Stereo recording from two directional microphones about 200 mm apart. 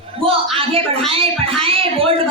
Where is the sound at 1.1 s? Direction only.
30° right (ahead or behind).